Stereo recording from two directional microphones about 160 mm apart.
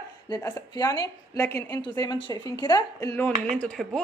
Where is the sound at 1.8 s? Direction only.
30° left (ahead or behind).